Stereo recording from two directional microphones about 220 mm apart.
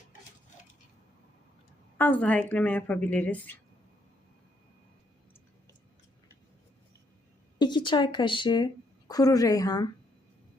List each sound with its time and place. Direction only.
2.0 s speech: 5° left (ahead or behind)
7.6 s a woman's voice: 20° left (ahead or behind)